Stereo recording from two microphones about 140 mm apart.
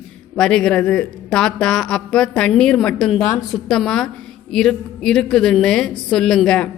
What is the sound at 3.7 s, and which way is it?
A woman's voice, 5° left (ahead or behind).